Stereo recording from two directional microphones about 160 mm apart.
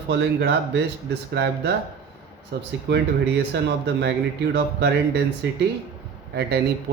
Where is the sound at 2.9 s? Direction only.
90° right.